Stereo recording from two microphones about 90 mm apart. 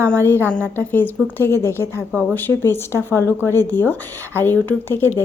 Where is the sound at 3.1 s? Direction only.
35° right (ahead or behind).